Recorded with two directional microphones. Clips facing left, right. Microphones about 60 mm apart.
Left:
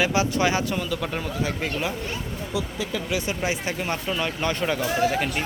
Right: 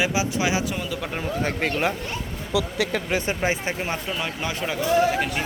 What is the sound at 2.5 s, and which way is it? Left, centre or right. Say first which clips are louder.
Speech: right 6 dB; right.